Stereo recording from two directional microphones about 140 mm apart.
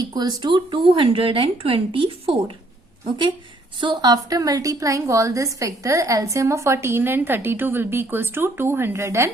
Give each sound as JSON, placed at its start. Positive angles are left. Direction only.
{"t": 0.0, "sound": "speech", "side_deg": -30}
{"t": 3.8, "sound": "a woman's voice", "side_deg": -30}